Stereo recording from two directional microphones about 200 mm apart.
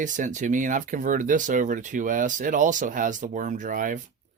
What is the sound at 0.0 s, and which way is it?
Speech, 40° right (ahead or behind).